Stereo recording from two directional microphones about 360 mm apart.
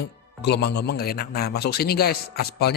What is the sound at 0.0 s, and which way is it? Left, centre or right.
Speech, left.